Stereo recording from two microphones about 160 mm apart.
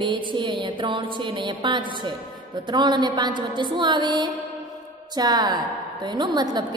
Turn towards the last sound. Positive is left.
turn(degrees=-25)  # may be behind; listen again after turning